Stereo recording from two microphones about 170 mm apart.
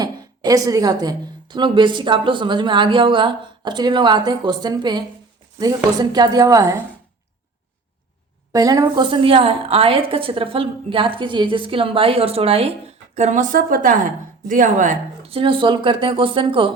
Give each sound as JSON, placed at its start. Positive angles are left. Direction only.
{"t": 0.0, "sound": "a woman's voice", "side_deg": -20}
{"t": 8.5, "sound": "a woman's voice", "side_deg": -20}
{"t": 15.3, "sound": "a woman's voice", "side_deg": -30}